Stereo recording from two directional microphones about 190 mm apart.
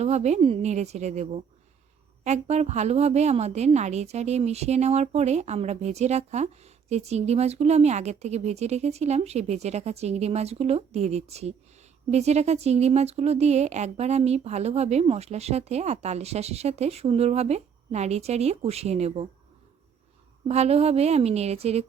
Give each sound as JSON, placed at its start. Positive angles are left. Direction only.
{"t": 0.0, "sound": "a woman's voice", "side_deg": -35}
{"t": 20.5, "sound": "a woman's voice", "side_deg": -35}